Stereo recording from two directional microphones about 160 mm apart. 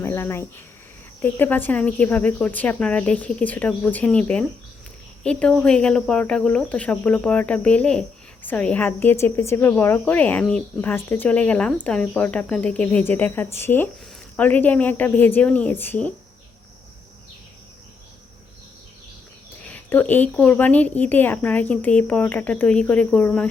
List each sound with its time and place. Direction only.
0.0 s speech: 15° left (ahead or behind)
19.7 s speech: 10° left (ahead or behind)